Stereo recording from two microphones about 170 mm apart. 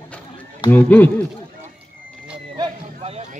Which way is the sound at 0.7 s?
10° left (ahead or behind).